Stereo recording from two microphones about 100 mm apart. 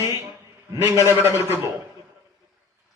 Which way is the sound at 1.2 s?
25° right (ahead or behind).